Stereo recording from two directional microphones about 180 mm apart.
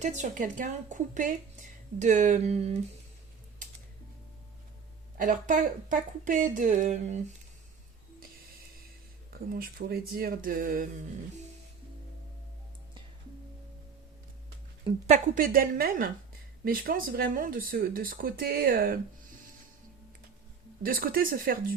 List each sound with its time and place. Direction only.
0.0 s speech: 45° right (ahead or behind)
5.1 s speech: 45° right (ahead or behind)
9.3 s speech: 55° right (ahead or behind)
15.0 s speech: 45° right (ahead or behind)
20.8 s speech: 55° right (ahead or behind)